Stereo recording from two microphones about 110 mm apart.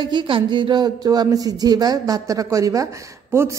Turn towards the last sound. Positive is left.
turn(degrees=-25)  # may be behind; listen again after turning